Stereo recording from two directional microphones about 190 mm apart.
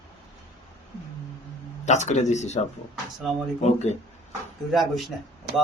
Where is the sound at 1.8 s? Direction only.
40° left (ahead or behind).